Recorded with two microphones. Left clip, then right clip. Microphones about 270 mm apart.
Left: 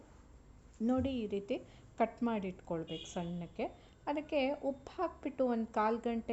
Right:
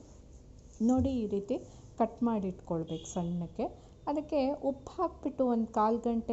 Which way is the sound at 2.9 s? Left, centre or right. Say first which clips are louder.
Right 4 dB; centre.